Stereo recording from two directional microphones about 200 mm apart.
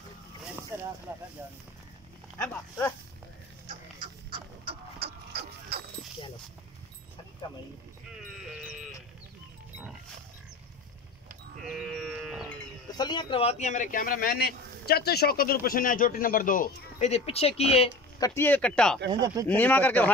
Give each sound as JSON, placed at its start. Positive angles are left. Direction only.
{"t": 0.7, "sound": "a sound", "side_deg": -15}
{"t": 1.1, "sound": "speech", "side_deg": -10}
{"t": 2.3, "sound": "speech", "side_deg": 10}
{"t": 4.3, "sound": "chicken", "side_deg": -30}
{"t": 11.7, "sound": "a sound", "side_deg": 0}
{"t": 12.9, "sound": "speech", "side_deg": 20}
{"t": 18.2, "sound": "speech", "side_deg": 10}